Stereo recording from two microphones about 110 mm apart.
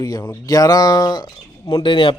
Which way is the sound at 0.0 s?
35° left (ahead or behind).